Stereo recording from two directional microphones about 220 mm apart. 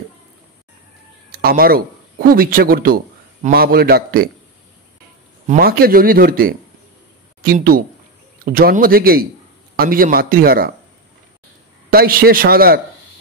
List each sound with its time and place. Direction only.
1.3 s a man's voice: 40° right (ahead or behind)
5.5 s speech: 45° right (ahead or behind)
11.9 s speech: 45° right (ahead or behind)